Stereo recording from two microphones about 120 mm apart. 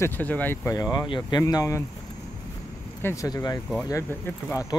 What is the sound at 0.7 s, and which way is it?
Speech, 30° left (ahead or behind).